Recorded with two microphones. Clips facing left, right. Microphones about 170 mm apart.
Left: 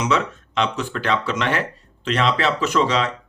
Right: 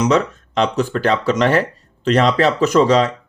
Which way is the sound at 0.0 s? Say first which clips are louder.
Right 6 dB; 40° right (ahead or behind).